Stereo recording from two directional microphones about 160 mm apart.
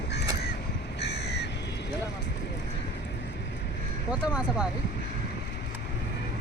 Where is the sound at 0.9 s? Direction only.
90° left.